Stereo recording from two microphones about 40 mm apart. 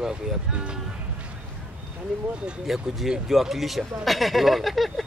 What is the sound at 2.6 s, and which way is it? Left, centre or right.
Speech, centre.